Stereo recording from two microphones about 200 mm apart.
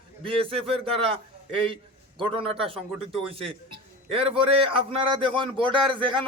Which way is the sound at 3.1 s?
30° right (ahead or behind).